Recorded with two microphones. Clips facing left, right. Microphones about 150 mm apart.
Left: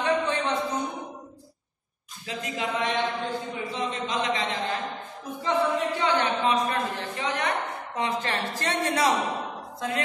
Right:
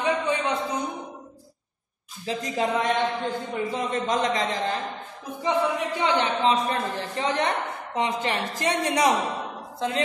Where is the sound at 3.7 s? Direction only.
45° right (ahead or behind).